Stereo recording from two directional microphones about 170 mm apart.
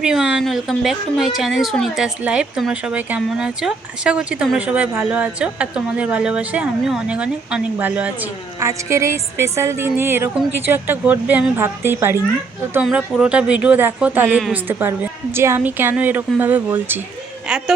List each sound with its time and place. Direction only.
0.0 s a woman's voice: 5° right (ahead or behind)